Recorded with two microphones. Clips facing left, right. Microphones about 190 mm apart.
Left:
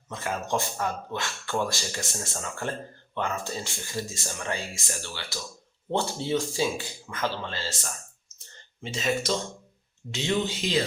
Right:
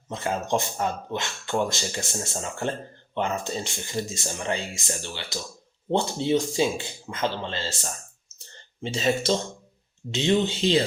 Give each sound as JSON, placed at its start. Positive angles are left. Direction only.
{"t": 0.1, "sound": "speech", "side_deg": -25}